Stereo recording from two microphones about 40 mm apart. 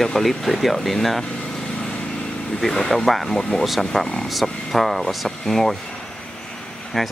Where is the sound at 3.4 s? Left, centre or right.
Centre.